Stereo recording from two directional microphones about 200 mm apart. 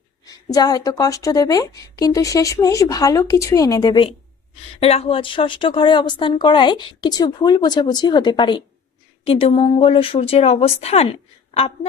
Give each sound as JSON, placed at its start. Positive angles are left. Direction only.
{"t": 0.3, "sound": "a woman's voice", "side_deg": 20}
{"t": 4.8, "sound": "speech", "side_deg": 30}